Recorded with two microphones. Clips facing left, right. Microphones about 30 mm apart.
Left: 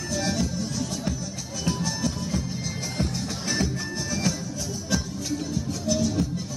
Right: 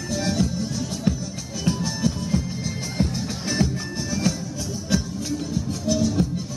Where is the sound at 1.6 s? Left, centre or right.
Centre.